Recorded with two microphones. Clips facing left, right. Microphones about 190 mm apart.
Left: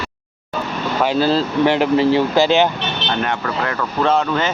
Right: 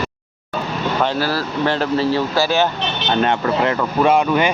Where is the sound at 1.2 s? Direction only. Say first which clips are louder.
Left 5 dB; 20° left (ahead or behind).